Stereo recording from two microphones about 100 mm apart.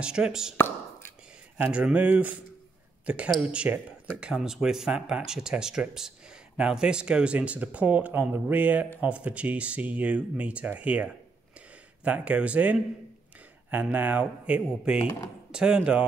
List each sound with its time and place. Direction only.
0.0 s speech: 10° right (ahead or behind)
1.6 s speech: 10° right (ahead or behind)
3.3 s speech: 15° right (ahead or behind)